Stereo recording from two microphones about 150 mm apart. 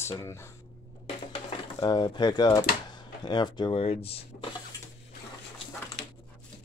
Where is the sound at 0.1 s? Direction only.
20° left (ahead or behind).